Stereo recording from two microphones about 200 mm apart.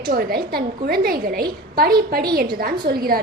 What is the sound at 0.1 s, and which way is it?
A woman's voice, 50° right (ahead or behind).